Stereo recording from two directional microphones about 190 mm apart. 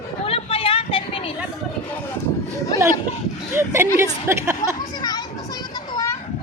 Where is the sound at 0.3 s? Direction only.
30° left (ahead or behind).